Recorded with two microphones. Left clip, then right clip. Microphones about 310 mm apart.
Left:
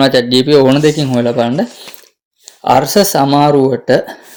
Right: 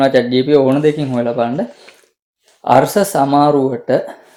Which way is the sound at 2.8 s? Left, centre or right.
Left.